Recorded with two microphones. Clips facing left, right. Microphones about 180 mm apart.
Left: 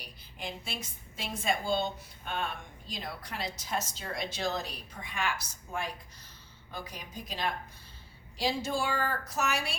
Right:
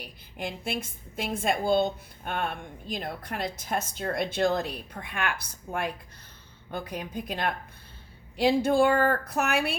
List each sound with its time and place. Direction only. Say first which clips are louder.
0.0 s a woman's voice: right 6 dB; 55° right (ahead or behind)